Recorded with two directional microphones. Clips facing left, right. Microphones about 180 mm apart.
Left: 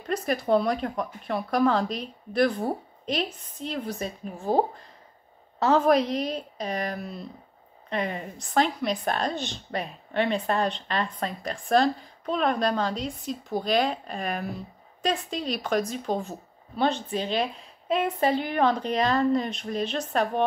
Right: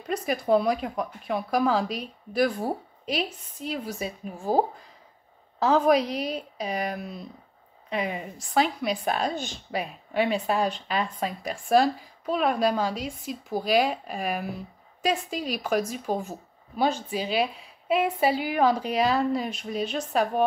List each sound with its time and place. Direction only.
0.0 s a woman's voice: centre (ahead or behind)